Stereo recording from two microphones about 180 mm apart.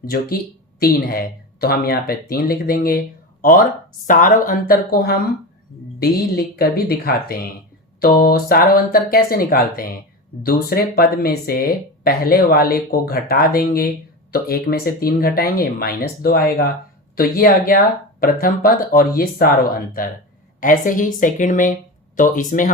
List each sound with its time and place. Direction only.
0.0 s speech: 55° left (ahead or behind)
20.6 s speech: 50° left (ahead or behind)